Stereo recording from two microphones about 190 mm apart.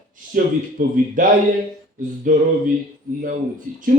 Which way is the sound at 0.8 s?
45° right (ahead or behind).